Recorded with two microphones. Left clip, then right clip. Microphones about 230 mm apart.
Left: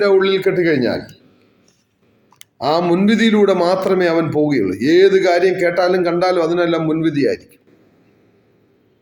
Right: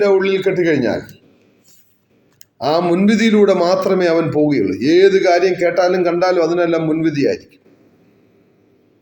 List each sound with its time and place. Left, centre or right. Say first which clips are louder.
0.0 s a man's voice: even; centre
2.6 s a man's voice: even; centre